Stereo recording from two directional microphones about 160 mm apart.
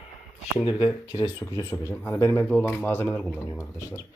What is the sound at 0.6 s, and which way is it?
Speech, 35° left (ahead or behind).